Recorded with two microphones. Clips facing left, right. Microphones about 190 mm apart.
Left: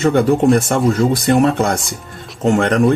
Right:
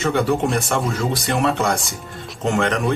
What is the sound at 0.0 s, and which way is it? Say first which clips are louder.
Speech: left 6 dB; 55° left (ahead or behind).